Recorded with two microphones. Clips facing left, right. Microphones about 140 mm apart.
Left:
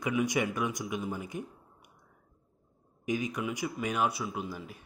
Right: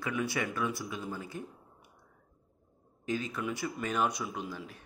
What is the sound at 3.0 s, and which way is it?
A man's voice, 15° left (ahead or behind).